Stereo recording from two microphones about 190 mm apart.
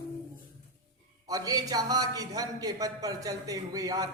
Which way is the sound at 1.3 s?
20° right (ahead or behind).